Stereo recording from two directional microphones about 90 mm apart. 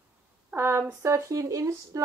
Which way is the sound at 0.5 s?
25° right (ahead or behind).